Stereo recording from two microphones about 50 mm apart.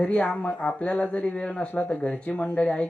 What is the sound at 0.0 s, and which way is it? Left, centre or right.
Speech, left.